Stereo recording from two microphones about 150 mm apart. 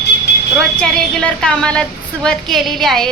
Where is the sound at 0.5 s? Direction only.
5° left (ahead or behind).